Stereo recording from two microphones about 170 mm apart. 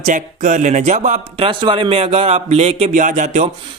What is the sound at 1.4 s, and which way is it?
A man's voice, 30° right (ahead or behind).